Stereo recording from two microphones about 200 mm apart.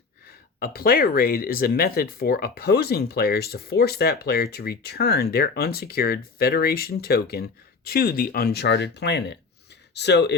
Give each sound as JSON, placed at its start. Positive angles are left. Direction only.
{"t": 0.3, "sound": "speech", "side_deg": 50}